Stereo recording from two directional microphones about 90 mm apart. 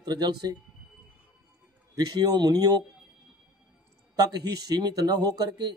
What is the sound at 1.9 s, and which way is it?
Speech, 45° right (ahead or behind).